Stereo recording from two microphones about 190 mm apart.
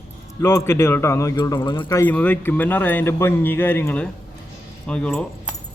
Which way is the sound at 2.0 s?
10° left (ahead or behind).